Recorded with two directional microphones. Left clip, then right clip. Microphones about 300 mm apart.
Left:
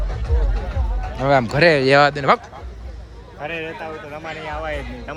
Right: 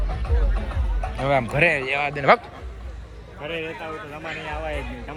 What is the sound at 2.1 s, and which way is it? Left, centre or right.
Speech, centre.